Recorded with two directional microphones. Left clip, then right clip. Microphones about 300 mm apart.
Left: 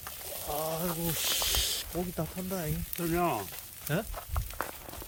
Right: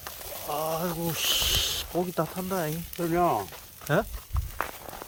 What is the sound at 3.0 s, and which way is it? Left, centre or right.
Frying, centre.